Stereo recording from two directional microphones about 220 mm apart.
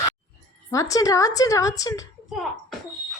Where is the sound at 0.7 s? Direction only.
15° left (ahead or behind).